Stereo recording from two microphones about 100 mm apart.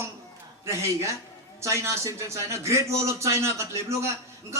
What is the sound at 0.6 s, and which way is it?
Speech, 30° right (ahead or behind).